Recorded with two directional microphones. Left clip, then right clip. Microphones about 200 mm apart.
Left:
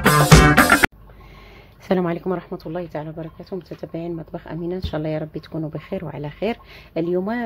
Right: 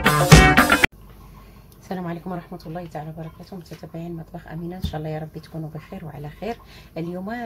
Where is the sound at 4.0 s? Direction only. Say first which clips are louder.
Left 6 dB; 45° left (ahead or behind).